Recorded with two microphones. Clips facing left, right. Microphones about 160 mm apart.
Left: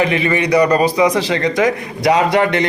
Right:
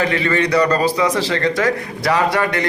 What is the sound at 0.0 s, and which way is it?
Speech, 20° left (ahead or behind).